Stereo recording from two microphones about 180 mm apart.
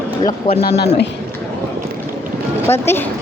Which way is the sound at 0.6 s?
65° left (ahead or behind).